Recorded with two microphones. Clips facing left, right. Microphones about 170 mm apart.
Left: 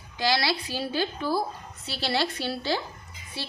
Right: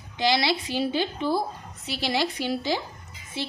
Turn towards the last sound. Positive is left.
turn(degrees=-20)  # may be behind; listen again after turning